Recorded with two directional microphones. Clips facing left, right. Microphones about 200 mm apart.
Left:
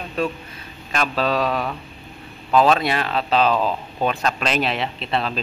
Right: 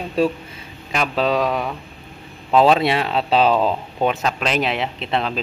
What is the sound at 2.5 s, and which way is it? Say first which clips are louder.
A man's voice: right 2 dB; 25° right (ahead or behind).